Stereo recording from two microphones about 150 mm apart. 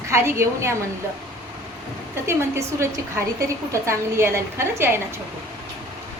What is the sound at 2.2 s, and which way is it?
A woman's voice, 20° right (ahead or behind).